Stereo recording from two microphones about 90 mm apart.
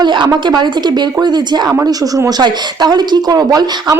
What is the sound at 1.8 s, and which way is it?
Speech, 40° right (ahead or behind).